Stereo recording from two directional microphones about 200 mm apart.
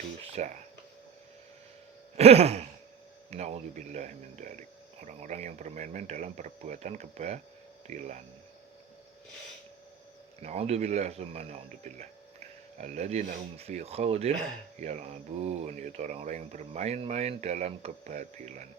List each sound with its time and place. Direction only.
0.3 s speech: 35° right (ahead or behind)
2.1 s speech: 30° right (ahead or behind)
10.4 s speech: 30° right (ahead or behind)